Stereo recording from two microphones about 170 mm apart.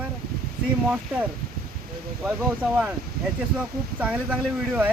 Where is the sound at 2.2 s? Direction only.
5° right (ahead or behind).